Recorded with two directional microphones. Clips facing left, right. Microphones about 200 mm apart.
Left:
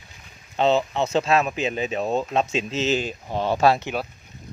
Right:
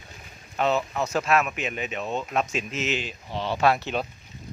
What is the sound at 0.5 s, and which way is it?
Speech, 25° left (ahead or behind).